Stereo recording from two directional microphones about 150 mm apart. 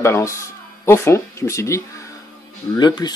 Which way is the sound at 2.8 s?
30° left (ahead or behind).